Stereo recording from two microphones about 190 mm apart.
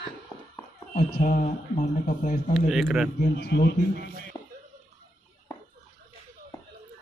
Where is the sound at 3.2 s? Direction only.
60° left (ahead or behind).